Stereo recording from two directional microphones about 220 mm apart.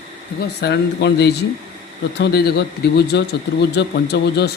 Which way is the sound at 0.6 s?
50° left (ahead or behind).